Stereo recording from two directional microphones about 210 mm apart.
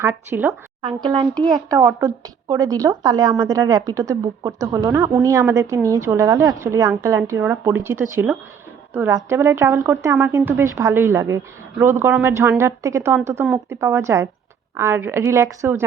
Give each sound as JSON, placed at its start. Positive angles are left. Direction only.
{"t": 0.0, "sound": "speech", "side_deg": -10}
{"t": 0.8, "sound": "speech", "side_deg": -20}